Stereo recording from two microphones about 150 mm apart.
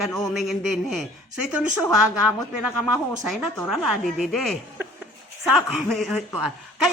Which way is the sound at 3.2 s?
Centre (ahead or behind).